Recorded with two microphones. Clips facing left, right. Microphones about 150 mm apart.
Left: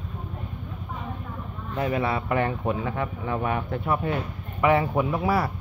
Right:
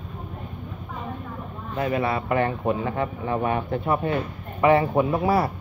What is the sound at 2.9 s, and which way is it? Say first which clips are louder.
Speech: right 3 dB; 10° right (ahead or behind).